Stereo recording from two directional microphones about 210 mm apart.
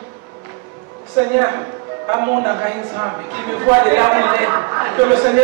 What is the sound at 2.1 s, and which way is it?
A man's voice, 25° right (ahead or behind).